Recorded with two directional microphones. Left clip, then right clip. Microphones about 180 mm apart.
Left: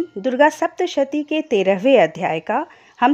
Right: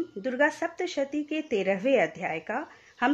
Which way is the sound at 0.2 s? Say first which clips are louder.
Left 11 dB; 45° left (ahead or behind).